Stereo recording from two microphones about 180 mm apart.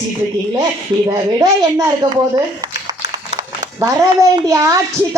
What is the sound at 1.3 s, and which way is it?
A woman's voice, 20° right (ahead or behind).